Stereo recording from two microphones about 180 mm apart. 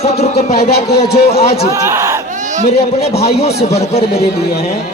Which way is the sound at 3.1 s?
65° left (ahead or behind).